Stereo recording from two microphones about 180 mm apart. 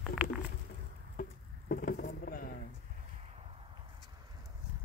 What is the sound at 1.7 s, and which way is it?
Vehicle, 55° left (ahead or behind).